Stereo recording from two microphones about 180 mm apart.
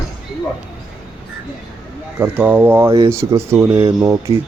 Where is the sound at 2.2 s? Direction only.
10° right (ahead or behind).